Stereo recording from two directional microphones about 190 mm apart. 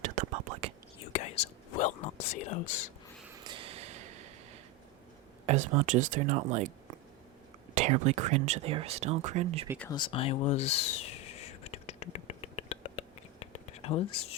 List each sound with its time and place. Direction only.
0.0 s whispering: 40° right (ahead or behind)
1.1 s whispering: 40° left (ahead or behind)
2.3 s speech: 40° left (ahead or behind)
3.4 s a sound: 25° right (ahead or behind)
5.5 s speech: 40° right (ahead or behind)
7.8 s speech: 35° right (ahead or behind)
9.9 s whispering: 25° left (ahead or behind)